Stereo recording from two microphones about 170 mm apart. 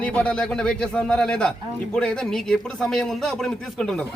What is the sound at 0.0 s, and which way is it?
Speech, 5° left (ahead or behind).